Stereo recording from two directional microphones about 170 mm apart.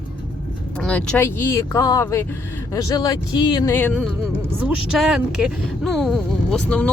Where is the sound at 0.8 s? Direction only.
5° left (ahead or behind).